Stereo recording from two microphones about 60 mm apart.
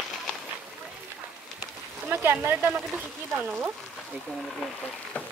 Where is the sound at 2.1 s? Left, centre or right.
Right.